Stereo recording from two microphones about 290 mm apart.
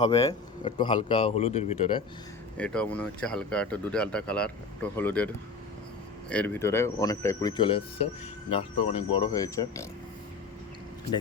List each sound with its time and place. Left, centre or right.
0.0 s speech: centre
2.6 s speech: centre